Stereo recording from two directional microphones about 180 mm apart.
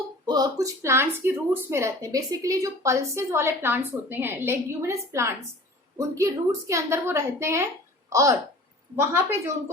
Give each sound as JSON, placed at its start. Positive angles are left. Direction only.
{"t": 0.3, "sound": "speech", "side_deg": -20}